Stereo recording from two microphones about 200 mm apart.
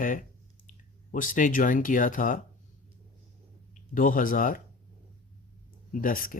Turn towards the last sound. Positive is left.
turn(degrees=45)  # may be behind; listen again after turning